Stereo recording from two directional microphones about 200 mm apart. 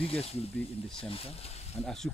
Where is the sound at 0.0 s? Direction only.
30° left (ahead or behind).